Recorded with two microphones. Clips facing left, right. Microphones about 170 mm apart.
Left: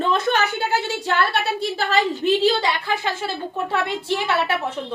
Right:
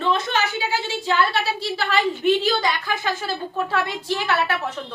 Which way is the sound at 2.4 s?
30° left (ahead or behind).